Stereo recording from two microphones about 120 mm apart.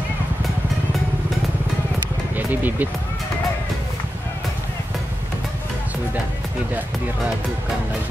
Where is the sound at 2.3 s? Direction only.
15° right (ahead or behind).